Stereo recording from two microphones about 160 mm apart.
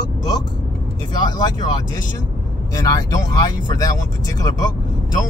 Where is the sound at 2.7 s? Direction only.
20° left (ahead or behind).